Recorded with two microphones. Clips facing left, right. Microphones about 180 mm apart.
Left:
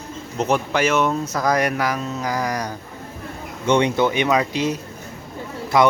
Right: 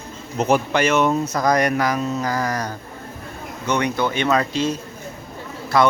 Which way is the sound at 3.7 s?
25° left (ahead or behind).